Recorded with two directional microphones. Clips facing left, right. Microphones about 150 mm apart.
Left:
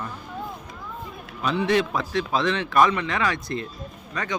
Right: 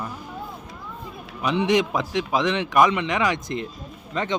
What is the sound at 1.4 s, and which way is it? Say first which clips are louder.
A man's voice: right 1 dB; 15° right (ahead or behind).